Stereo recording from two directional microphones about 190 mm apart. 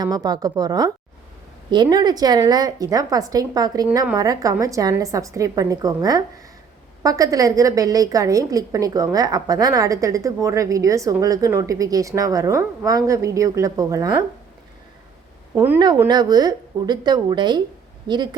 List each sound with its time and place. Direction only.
0.0 s a woman's voice: 20° right (ahead or behind)
15.5 s a woman's voice: 10° right (ahead or behind)
16.0 s a woman's voice: 20° right (ahead or behind)